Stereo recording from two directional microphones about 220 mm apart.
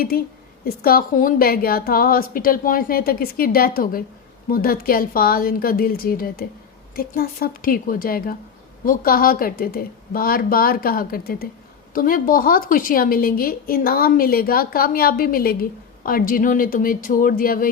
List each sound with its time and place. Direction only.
0.6 s a woman's voice: 40° left (ahead or behind)